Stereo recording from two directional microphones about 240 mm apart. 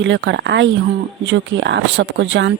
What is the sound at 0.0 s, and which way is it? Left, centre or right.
Speech, right.